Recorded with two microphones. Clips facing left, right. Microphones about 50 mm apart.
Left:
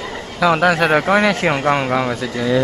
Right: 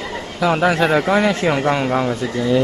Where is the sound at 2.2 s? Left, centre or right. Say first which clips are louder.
Even; left.